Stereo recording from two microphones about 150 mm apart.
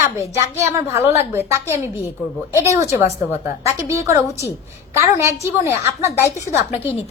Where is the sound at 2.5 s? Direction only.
20° right (ahead or behind).